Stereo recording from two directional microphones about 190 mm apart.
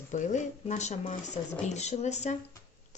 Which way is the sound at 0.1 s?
40° left (ahead or behind).